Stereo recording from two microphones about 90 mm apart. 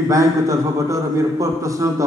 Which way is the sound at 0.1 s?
35° right (ahead or behind).